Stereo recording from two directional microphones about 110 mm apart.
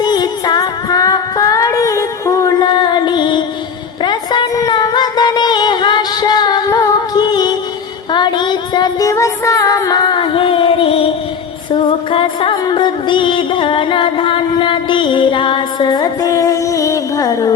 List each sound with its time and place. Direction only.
0.0 s music: 40° left (ahead or behind)
4.0 s a sound: 45° left (ahead or behind)
8.1 s music: 45° left (ahead or behind)